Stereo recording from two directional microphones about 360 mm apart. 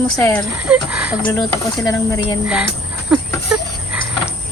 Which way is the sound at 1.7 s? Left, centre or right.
Centre.